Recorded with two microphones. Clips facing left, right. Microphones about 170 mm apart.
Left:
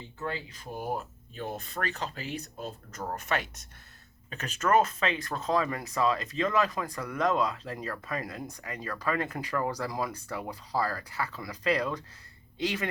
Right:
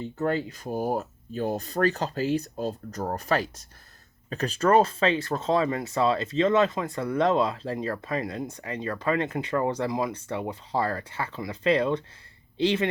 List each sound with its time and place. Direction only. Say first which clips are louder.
0.2 s speech: right 9 dB; 45° right (ahead or behind); by 12.9 s 25° right (ahead or behind)